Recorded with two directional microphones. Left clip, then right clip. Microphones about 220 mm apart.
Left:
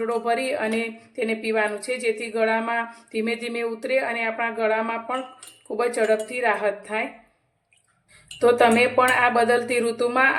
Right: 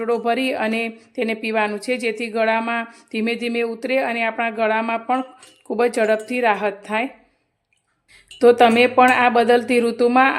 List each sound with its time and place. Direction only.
0.0 s a woman's voice: 45° right (ahead or behind)
8.4 s speech: 40° right (ahead or behind)